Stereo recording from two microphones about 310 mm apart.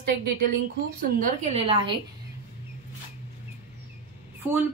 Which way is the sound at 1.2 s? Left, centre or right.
Right.